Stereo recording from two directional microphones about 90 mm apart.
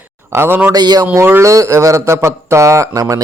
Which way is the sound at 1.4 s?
35° right (ahead or behind).